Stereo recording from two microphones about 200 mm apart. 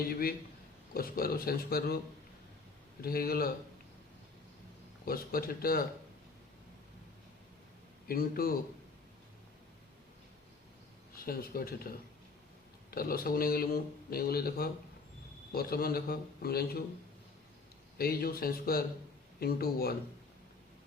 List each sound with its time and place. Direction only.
0.0 s speech: 50° left (ahead or behind)
3.0 s speech: 50° left (ahead or behind)
5.0 s speech: 45° left (ahead or behind)
8.0 s speech: 45° left (ahead or behind)
11.3 s speech: 50° left (ahead or behind)
17.9 s speech: 50° left (ahead or behind)